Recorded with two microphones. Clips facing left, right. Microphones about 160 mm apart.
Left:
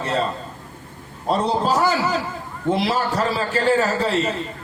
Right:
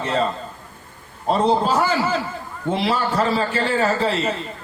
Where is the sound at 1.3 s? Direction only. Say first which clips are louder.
Right 2 dB; 40° left (ahead or behind).